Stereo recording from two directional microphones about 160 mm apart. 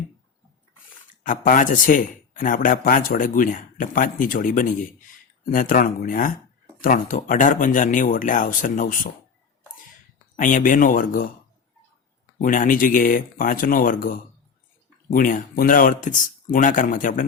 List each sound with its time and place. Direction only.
1.2 s a man's voice: 55° left (ahead or behind)
10.3 s a man's voice: 55° left (ahead or behind)
12.4 s a man's voice: 55° left (ahead or behind)